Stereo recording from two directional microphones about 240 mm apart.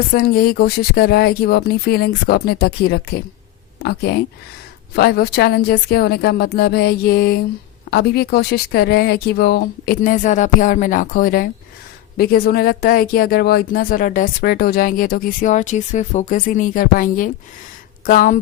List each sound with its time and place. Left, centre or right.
0.1 s speech: left